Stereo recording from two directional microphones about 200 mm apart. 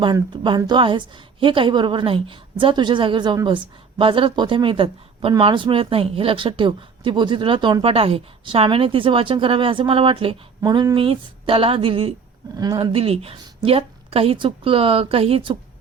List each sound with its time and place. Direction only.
0.0 s a woman's voice: 25° right (ahead or behind)